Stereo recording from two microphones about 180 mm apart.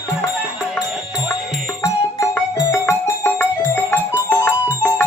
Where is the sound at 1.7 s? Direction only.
20° left (ahead or behind).